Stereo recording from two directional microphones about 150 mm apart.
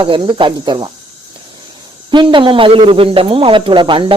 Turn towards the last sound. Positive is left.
turn(degrees=-35)  # may be behind; listen again after turning